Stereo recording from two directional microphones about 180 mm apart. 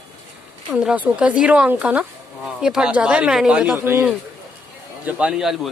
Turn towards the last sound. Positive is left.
turn(degrees=0)  # may be behind; listen again after turning